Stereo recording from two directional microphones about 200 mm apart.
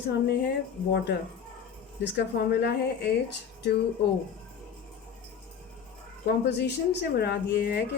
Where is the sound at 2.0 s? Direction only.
60° left (ahead or behind).